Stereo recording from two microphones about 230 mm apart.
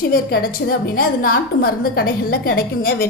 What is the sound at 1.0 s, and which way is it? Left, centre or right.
A woman's voice, left.